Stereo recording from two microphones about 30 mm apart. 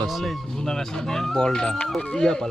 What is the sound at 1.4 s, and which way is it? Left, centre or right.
Speech, left.